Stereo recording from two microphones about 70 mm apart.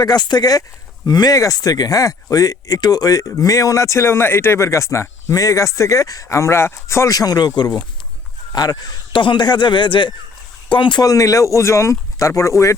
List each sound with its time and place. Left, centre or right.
0.0 s speech: left
6.2 s speech: left
8.5 s speech: left
9.3 s a man's voice: left
10.9 s speech: left